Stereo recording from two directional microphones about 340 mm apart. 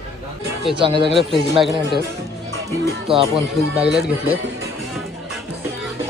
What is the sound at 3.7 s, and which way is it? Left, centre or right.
Speech, centre.